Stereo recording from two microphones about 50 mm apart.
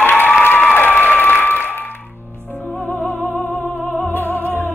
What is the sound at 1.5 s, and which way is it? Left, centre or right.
Music, left.